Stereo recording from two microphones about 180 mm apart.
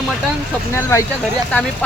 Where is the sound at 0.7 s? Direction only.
15° left (ahead or behind).